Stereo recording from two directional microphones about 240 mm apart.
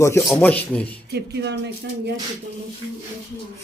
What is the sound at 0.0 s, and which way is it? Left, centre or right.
Speech, centre.